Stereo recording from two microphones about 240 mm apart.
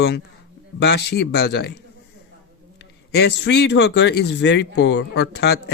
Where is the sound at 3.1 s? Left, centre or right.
Left.